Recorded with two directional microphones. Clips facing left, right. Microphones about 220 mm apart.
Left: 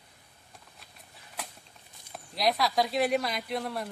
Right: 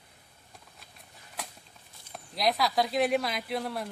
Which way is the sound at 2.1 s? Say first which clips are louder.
Even; centre (ahead or behind).